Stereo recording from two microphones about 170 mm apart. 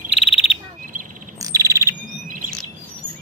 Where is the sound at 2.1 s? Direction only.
50° right (ahead or behind).